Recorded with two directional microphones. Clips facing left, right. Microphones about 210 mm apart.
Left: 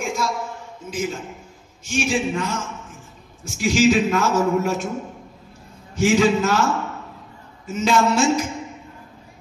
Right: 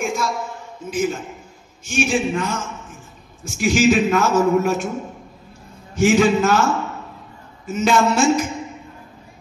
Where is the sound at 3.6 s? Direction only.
55° right (ahead or behind).